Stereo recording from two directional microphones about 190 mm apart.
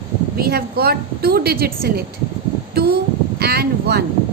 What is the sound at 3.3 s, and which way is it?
Speech, 55° right (ahead or behind).